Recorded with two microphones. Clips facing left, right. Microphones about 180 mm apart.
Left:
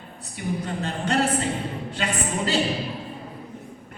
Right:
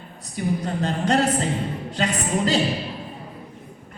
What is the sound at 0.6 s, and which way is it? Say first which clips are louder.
Speech: right 4 dB; 35° right (ahead or behind).